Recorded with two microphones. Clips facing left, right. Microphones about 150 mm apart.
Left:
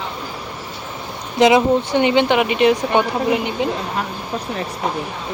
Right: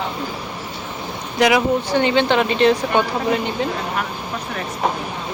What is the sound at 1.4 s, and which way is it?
Speech, 20° left (ahead or behind).